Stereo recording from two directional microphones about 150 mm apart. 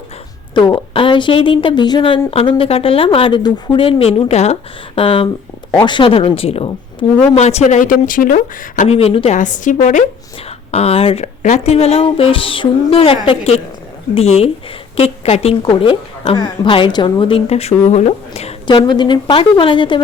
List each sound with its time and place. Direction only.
0.5 s speech: 30° left (ahead or behind)
7.0 s speech: 30° left (ahead or behind)
7.3 s speech: 45° left (ahead or behind); by 8.4 s 65° left (ahead or behind)
8.8 s a woman's voice: 45° left (ahead or behind)
10.7 s a woman's voice: 45° left (ahead or behind)